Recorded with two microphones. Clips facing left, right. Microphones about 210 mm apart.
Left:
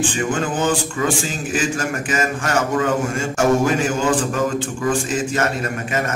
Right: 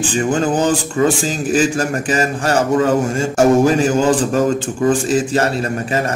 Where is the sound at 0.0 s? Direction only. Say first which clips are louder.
Right 4 dB; 35° right (ahead or behind).